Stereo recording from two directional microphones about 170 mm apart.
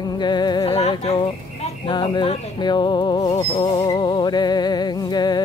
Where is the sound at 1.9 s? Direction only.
25° left (ahead or behind).